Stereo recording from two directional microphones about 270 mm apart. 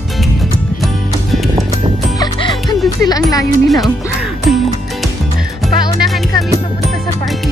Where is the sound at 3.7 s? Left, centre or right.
Centre.